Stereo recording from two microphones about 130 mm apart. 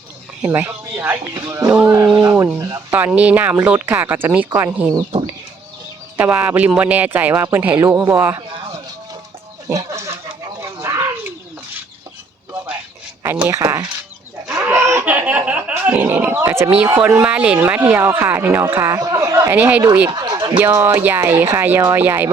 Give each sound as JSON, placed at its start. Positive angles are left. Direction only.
{"t": 0.4, "sound": "speech", "side_deg": -15}
{"t": 3.0, "sound": "speech", "side_deg": -10}
{"t": 6.1, "sound": "speech", "side_deg": -15}
{"t": 9.6, "sound": "a sound", "side_deg": -20}
{"t": 13.2, "sound": "speech", "side_deg": -15}
{"t": 14.6, "sound": "laughter", "side_deg": -20}
{"t": 15.0, "sound": "speech", "side_deg": -10}
{"t": 20.1, "sound": "scratch", "side_deg": -30}
{"t": 20.6, "sound": "speech", "side_deg": -15}